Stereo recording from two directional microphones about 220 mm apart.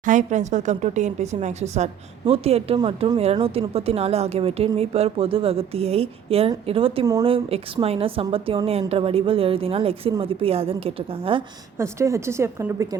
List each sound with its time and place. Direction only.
0.0 s speech: 35° right (ahead or behind)
11.8 s a woman's voice: 15° right (ahead or behind)